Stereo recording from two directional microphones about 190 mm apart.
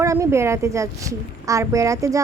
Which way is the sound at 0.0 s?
15° right (ahead or behind).